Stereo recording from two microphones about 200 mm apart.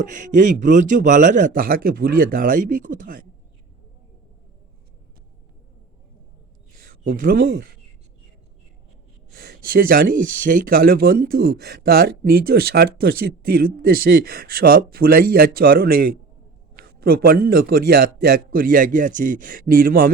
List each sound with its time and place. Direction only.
0.0 s a man's voice: 40° right (ahead or behind)
6.7 s speech: 45° right (ahead or behind)
9.3 s speech: 50° right (ahead or behind)